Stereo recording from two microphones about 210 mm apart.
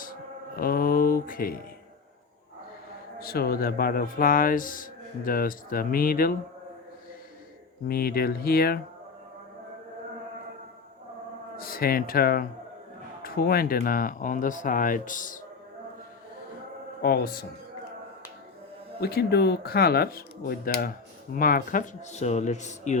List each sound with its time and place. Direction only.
0.0 s music: 40° left (ahead or behind)
3.2 s speech: 45° left (ahead or behind)
7.9 s speech: 45° left (ahead or behind)
11.5 s speech: 45° left (ahead or behind)
17.0 s speech: 45° left (ahead or behind)
18.9 s speech: 50° left (ahead or behind)